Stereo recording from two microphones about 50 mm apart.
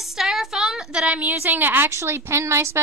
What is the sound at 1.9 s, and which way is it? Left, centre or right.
Speech, right.